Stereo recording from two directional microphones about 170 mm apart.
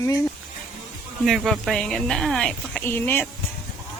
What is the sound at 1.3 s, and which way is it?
Speech, centre (ahead or behind).